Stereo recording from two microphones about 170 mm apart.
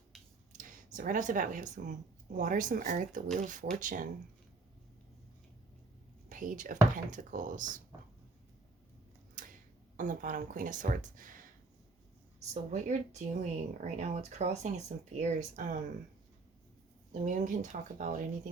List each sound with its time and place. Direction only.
0.5 s speech: 50° right (ahead or behind)
6.2 s speech: 50° right (ahead or behind)
9.4 s a sound: 50° right (ahead or behind)
10.0 s speech: 50° right (ahead or behind)
12.7 s speech: 40° right (ahead or behind)
17.1 s speech: 45° right (ahead or behind)